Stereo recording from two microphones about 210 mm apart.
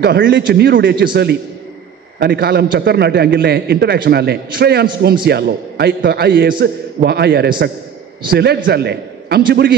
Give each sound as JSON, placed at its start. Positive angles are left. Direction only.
{"t": 0.0, "sound": "a man's voice", "side_deg": -50}